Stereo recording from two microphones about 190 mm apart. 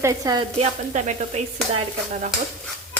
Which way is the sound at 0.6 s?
35° right (ahead or behind).